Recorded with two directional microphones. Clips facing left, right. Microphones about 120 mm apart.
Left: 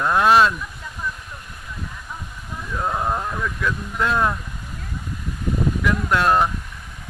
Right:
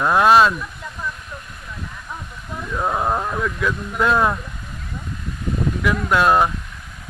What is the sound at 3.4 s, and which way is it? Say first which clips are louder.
Speech: right 2 dB; 10° right (ahead or behind).